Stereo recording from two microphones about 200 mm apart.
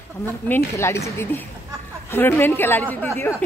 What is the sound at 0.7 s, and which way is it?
Speech, 15° left (ahead or behind).